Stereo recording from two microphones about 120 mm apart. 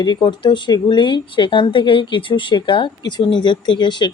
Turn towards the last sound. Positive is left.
turn(degrees=40)  # may be behind; listen again after turning